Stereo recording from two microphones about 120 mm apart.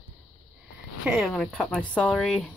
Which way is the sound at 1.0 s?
5° right (ahead or behind).